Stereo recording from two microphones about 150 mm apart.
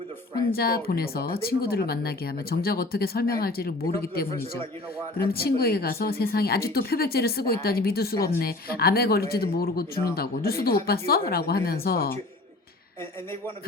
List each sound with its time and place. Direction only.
0.5 s speech: 90° left